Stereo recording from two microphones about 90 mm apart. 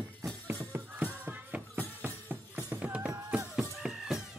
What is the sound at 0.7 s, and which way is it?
Music, 20° right (ahead or behind).